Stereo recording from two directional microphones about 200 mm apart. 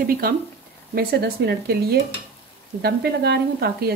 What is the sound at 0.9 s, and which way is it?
Speech, 55° right (ahead or behind).